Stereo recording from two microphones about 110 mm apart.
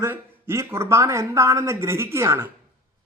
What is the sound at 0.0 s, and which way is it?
Speech, 25° right (ahead or behind).